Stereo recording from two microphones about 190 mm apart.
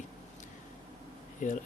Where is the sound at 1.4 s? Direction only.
40° left (ahead or behind).